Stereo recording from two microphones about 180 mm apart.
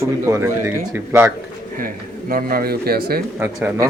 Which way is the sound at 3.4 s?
10° right (ahead or behind).